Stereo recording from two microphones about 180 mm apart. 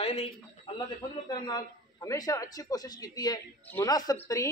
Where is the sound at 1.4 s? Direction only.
20° left (ahead or behind).